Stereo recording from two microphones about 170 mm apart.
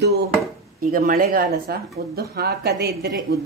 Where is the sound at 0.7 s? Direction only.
55° right (ahead or behind).